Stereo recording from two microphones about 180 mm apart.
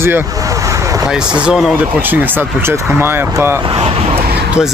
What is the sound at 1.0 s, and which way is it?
Speech, 5° right (ahead or behind).